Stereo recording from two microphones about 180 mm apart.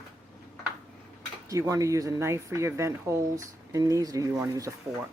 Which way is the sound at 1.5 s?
15° right (ahead or behind).